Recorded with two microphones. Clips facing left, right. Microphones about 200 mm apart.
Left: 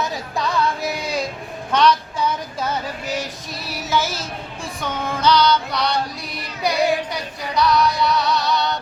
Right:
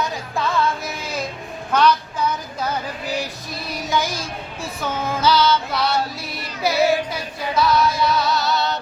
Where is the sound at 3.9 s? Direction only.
15° right (ahead or behind).